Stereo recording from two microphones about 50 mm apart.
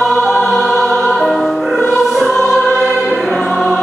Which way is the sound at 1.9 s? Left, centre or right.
Centre.